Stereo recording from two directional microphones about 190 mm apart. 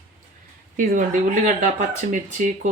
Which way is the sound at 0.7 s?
45° right (ahead or behind).